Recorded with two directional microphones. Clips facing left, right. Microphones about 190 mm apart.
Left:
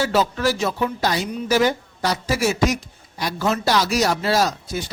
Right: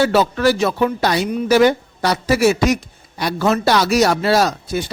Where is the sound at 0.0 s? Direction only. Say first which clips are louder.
Right 5 dB; 65° right (ahead or behind).